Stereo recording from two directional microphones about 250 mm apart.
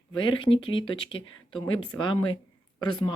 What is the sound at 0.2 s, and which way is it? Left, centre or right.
Speech, centre.